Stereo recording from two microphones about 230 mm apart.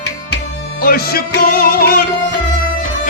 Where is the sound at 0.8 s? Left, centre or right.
Left.